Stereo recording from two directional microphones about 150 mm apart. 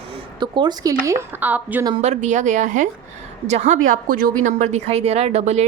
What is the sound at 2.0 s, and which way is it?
Speech, 50° right (ahead or behind).